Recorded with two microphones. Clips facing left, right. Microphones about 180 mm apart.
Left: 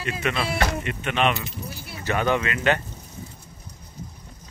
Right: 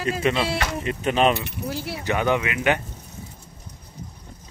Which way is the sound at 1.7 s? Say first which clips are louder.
Right 10 dB; 90° right.